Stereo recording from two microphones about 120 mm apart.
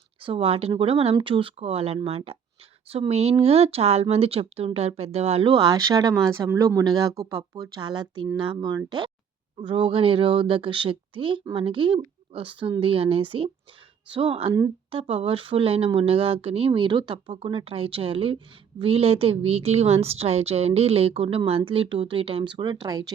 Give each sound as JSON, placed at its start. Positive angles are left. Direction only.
{"t": 0.2, "sound": "a woman's voice", "side_deg": -50}